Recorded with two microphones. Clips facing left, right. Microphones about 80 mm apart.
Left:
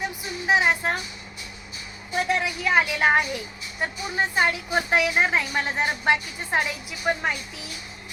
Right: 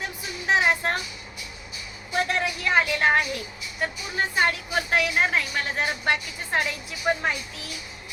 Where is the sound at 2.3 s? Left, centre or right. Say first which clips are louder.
Left 2 dB; centre.